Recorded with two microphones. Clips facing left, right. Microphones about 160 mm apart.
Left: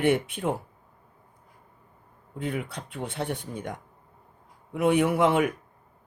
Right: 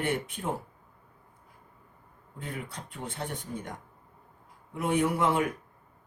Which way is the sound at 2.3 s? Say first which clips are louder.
Left 7 dB; 75° left (ahead or behind).